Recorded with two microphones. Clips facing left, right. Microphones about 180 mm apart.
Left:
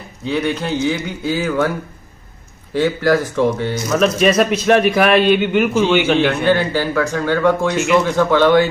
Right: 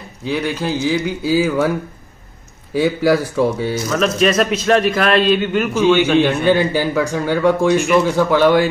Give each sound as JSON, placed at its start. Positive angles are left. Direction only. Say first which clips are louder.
{"t": 0.2, "sound": "a man's voice", "louder": "left 1 dB", "side_deg": 0}
{"t": 2.7, "sound": "speech", "louder": "even", "side_deg": -10}
{"t": 3.9, "sound": "a man's voice", "louder": "left 2 dB", "side_deg": 5}
{"t": 6.2, "sound": "speech", "louder": "right 1 dB", "side_deg": -15}